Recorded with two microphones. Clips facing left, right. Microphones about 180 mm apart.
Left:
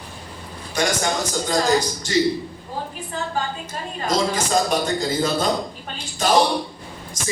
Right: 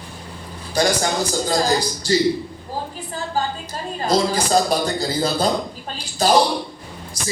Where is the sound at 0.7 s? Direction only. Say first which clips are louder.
Right 3 dB; 35° right (ahead or behind).